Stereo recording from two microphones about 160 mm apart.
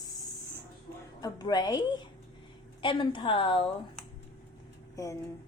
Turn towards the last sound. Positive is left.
turn(degrees=20)  # may be behind; listen again after turning